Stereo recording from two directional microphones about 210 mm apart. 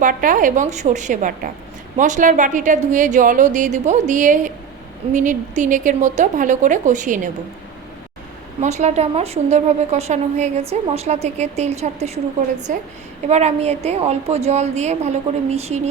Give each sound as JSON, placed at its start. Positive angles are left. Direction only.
{"t": 0.0, "sound": "a woman's voice", "side_deg": -40}
{"t": 8.6, "sound": "a woman's voice", "side_deg": -30}